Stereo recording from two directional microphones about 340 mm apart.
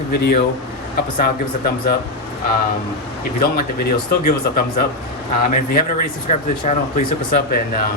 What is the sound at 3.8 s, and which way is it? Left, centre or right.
Speech, left.